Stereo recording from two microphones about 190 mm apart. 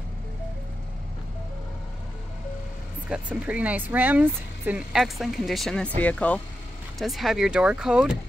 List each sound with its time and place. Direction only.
3.1 s speech: 5° right (ahead or behind)